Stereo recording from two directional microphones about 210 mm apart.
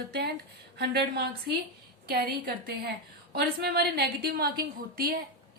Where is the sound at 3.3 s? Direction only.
50° right (ahead or behind).